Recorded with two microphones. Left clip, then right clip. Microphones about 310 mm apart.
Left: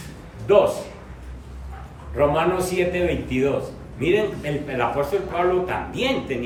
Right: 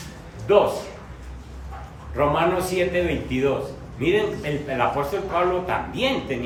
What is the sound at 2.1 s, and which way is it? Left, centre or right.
Speech, centre.